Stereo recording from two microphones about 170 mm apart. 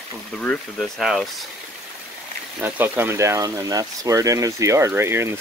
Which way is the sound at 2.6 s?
10° right (ahead or behind).